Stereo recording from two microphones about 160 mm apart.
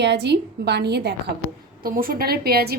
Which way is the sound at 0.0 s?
90° right.